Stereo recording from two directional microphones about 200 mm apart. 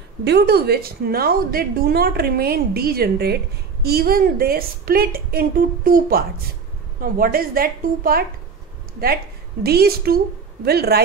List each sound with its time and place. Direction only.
0.2 s a woman's voice: 55° right (ahead or behind)